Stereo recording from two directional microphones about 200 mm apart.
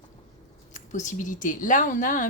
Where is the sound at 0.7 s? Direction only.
40° left (ahead or behind).